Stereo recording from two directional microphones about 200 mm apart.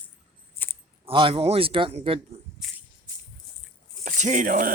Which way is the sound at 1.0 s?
25° right (ahead or behind).